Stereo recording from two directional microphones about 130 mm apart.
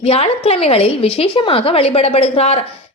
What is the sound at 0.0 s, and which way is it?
A woman's voice, 50° left (ahead or behind).